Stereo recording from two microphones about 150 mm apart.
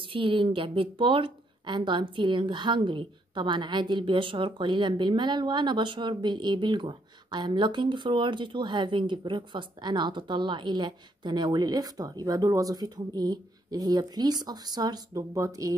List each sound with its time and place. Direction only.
0.0 s speech: 35° right (ahead or behind)